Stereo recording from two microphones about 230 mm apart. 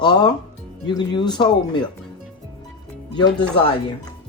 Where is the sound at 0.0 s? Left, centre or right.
Centre.